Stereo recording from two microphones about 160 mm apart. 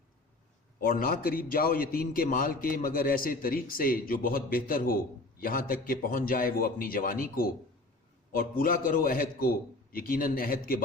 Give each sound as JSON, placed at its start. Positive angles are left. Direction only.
{"t": 0.8, "sound": "a man's voice", "side_deg": 65}